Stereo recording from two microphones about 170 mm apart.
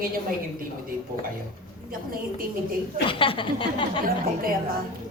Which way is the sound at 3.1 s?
30° left (ahead or behind).